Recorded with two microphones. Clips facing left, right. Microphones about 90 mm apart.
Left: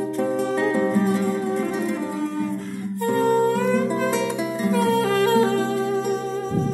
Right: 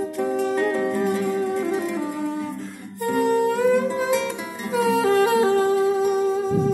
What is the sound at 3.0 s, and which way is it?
Humming, 20° right (ahead or behind).